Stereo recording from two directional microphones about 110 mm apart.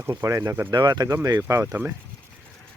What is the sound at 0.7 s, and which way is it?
Speech, 40° right (ahead or behind).